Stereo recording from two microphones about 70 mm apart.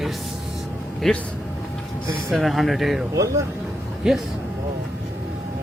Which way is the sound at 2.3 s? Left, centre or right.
Centre.